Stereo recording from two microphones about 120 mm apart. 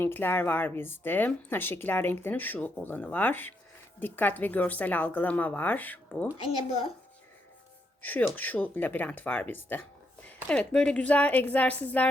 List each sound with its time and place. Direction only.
0.0 s a woman's voice: 20° left (ahead or behind)
8.0 s a woman's voice: 15° left (ahead or behind)